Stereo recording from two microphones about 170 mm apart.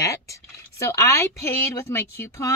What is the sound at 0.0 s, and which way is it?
A woman's voice, 20° left (ahead or behind).